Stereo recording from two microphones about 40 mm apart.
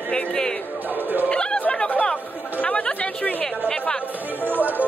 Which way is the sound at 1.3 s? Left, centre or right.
Left.